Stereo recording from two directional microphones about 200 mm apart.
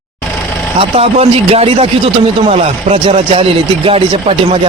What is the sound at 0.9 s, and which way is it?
A man's voice, 30° right (ahead or behind).